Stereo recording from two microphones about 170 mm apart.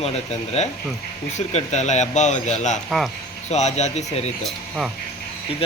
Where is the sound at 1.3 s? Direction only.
45° left (ahead or behind).